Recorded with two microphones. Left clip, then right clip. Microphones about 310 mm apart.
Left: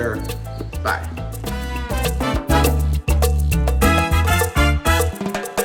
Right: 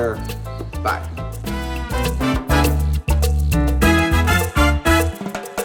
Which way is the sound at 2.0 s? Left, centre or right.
Left.